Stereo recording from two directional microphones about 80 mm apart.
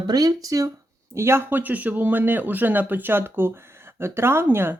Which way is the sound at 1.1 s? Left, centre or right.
Right.